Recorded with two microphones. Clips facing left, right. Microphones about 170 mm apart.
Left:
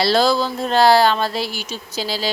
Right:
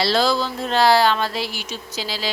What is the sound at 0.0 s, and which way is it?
Speech, 45° left (ahead or behind).